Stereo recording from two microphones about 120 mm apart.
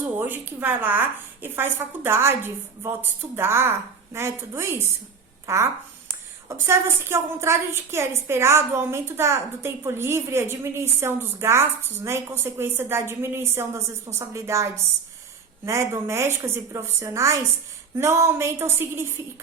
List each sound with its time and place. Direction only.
0.2 s a woman's voice: 15° right (ahead or behind)
6.7 s a woman's voice: 20° right (ahead or behind)